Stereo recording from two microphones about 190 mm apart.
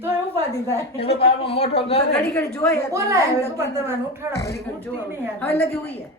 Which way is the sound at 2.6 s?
15° left (ahead or behind).